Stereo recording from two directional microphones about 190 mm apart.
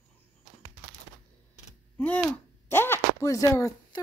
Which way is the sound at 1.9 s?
5° left (ahead or behind).